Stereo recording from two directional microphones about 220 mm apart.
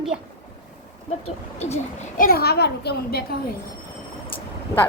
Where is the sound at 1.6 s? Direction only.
35° left (ahead or behind).